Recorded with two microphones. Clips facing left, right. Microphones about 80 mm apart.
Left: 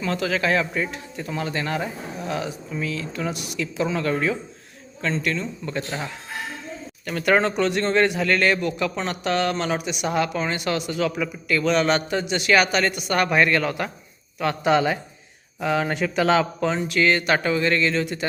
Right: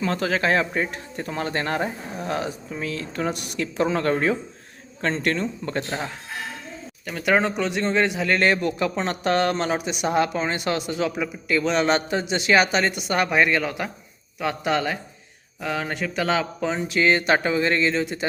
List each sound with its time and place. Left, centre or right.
0.0 s speech: right
7.0 s speech: centre
8.4 s a man's voice: right; by 16.6 s centre
16.6 s a man's voice: centre